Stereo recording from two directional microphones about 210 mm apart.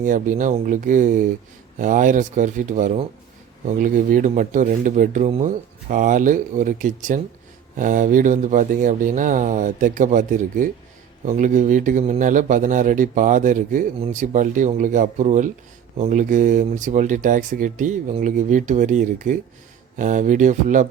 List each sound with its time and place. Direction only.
0.0 s speech: 40° right (ahead or behind)